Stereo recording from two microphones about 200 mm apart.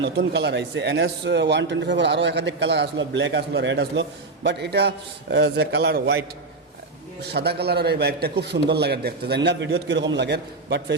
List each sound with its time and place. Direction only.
0.0 s a man's voice: 60° right (ahead or behind)